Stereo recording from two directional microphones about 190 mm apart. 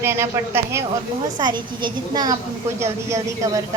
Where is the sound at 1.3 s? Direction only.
25° right (ahead or behind).